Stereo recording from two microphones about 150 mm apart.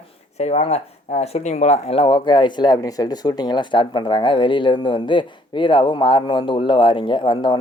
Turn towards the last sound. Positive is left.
turn(degrees=35)  # may be behind; listen again after turning